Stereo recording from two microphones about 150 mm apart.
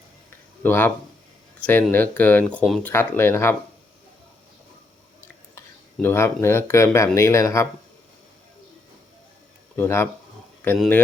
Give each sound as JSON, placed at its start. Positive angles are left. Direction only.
{"t": 0.6, "sound": "speech", "side_deg": 10}
{"t": 5.5, "sound": "speech", "side_deg": 15}
{"t": 9.7, "sound": "speech", "side_deg": 15}